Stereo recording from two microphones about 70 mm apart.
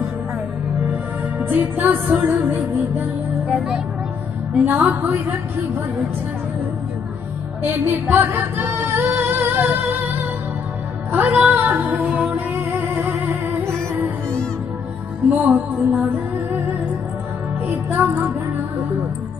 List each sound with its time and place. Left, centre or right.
1.4 s music: right
3.4 s speech: centre
4.6 s music: right
7.6 s music: right
8.4 s a sound: right
11.1 s music: right
13.7 s music: right
15.2 s music: right
17.6 s music: right